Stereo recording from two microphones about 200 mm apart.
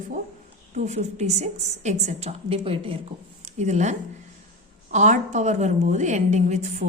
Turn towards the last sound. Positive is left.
turn(degrees=-35)  # may be behind; listen again after turning